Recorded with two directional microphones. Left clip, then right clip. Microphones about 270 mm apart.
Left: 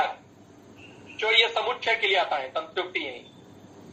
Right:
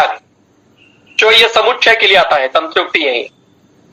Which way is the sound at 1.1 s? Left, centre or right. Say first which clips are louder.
Right 14 dB; right.